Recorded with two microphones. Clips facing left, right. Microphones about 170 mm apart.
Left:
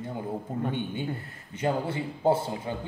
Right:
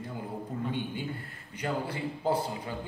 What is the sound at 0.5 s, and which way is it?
A man's voice, 25° left (ahead or behind).